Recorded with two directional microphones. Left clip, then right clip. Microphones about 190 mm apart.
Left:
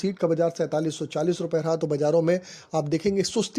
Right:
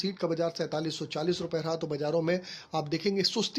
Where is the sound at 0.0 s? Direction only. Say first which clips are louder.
Left 7 dB; 30° left (ahead or behind).